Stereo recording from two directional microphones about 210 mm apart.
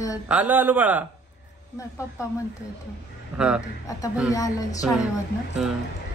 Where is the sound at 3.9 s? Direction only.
15° left (ahead or behind).